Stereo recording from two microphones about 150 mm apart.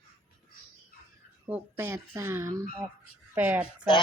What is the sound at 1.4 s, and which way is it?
Speech, 15° right (ahead or behind).